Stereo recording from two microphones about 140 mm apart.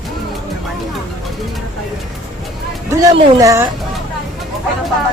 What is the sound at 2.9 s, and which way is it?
Speech, 25° right (ahead or behind).